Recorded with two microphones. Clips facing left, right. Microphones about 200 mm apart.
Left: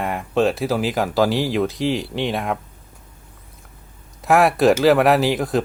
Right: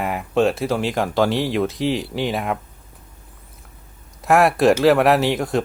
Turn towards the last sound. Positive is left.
turn(degrees=0)  # may be behind; listen again after turning